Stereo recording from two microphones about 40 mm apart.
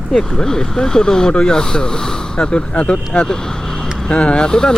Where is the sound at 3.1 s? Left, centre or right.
Centre.